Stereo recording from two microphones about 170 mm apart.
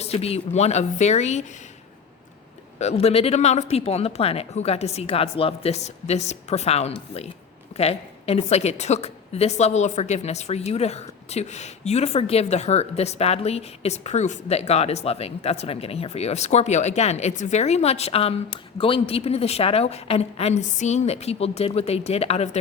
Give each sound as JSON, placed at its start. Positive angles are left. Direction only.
{"t": 0.0, "sound": "a woman's voice", "side_deg": 35}
{"t": 2.7, "sound": "a woman's voice", "side_deg": 40}